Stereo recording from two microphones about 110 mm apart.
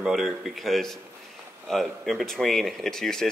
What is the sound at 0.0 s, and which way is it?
Speech, centre (ahead or behind).